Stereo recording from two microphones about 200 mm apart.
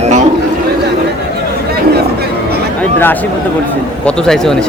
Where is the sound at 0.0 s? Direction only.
35° right (ahead or behind).